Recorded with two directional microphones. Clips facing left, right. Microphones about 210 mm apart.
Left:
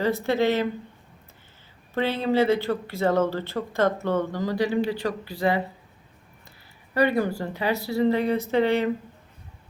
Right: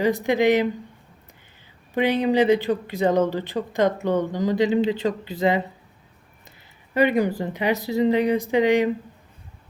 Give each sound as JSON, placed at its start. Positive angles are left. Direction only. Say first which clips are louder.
{"t": 0.0, "sound": "speech", "louder": "right 3 dB", "side_deg": -15}
{"t": 1.9, "sound": "speech", "louder": "right 4 dB", "side_deg": -15}
{"t": 6.9, "sound": "speech", "louder": "right 3 dB", "side_deg": -20}